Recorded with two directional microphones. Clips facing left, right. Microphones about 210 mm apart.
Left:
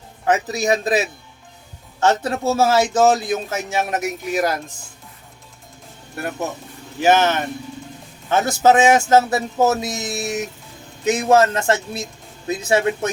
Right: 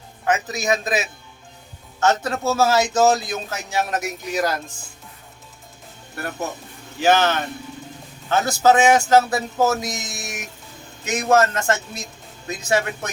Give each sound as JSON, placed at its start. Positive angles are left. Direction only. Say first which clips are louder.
{"t": 0.3, "sound": "a man's voice", "louder": "left 3 dB", "side_deg": 35}
{"t": 7.0, "sound": "a man's voice", "louder": "left 2 dB", "side_deg": 20}